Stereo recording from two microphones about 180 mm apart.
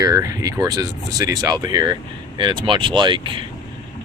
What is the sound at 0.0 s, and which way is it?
Speech, 15° right (ahead or behind).